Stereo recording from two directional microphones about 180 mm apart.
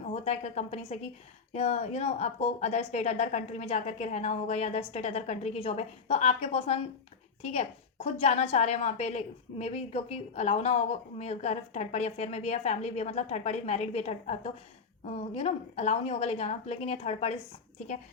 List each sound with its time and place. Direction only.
0.0 s a woman's voice: 40° left (ahead or behind)